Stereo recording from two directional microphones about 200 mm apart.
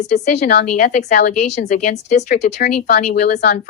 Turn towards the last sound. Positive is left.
turn(degrees=45)  # may be behind; listen again after turning